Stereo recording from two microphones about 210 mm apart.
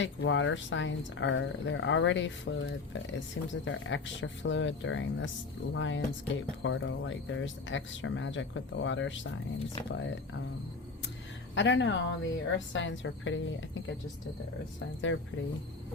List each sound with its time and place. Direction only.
0.0 s speech: 60° left (ahead or behind)
11.5 s speech: 60° left (ahead or behind)
15.1 s speech: 65° left (ahead or behind)